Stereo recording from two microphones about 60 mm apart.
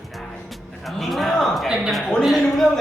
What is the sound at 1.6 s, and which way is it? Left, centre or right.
Speech, centre.